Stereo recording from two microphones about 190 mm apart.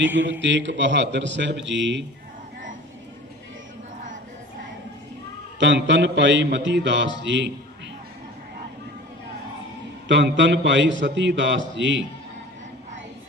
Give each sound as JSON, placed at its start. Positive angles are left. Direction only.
{"t": 0.2, "sound": "a man's voice", "side_deg": -70}
{"t": 5.5, "sound": "a man's voice", "side_deg": -70}
{"t": 10.1, "sound": "a man's voice", "side_deg": -70}